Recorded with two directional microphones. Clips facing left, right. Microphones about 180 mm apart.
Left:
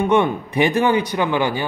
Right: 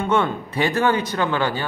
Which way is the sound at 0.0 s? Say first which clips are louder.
Left 4 dB; 15° left (ahead or behind).